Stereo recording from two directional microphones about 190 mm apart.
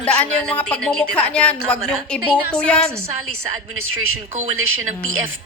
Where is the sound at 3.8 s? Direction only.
90° right.